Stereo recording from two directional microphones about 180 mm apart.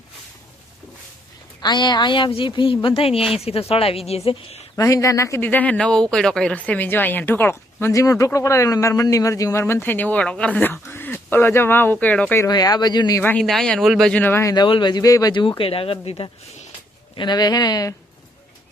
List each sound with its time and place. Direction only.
1.6 s a woman's voice: 25° left (ahead or behind)
4.8 s speech: 20° left (ahead or behind)
12.5 s speech: 20° left (ahead or behind)
13.4 s speech: centre (ahead or behind); by 17.9 s 20° left (ahead or behind)